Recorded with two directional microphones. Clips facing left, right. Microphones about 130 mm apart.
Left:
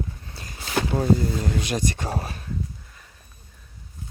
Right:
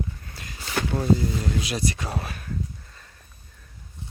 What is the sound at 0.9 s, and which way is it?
Speech, 35° left (ahead or behind).